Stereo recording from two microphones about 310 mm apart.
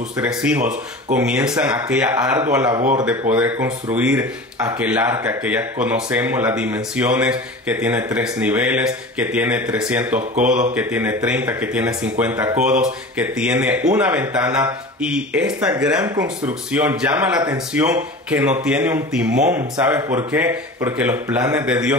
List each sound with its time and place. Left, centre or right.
0.2 s speech: centre
2.7 s speech: right
3.1 s speech: centre